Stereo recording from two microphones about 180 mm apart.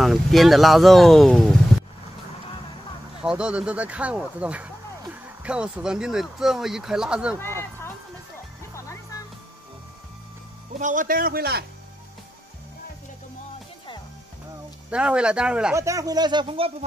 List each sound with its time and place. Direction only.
0.0 s speech: centre (ahead or behind)
3.3 s speech: 5° right (ahead or behind)
7.3 s speech: 15° left (ahead or behind)
10.8 s a man's voice: 45° right (ahead or behind)
14.9 s speech: 5° right (ahead or behind)
15.7 s speech: 15° right (ahead or behind)